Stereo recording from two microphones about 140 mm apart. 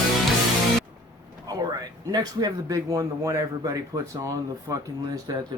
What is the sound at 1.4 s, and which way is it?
Speech, 30° right (ahead or behind).